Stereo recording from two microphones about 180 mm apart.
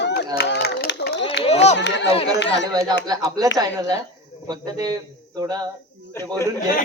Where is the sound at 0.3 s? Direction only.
65° left (ahead or behind).